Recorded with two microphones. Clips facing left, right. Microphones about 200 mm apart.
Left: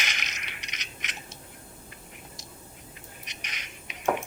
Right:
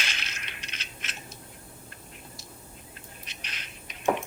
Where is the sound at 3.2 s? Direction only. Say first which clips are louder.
Left 1 dB; 15° left (ahead or behind).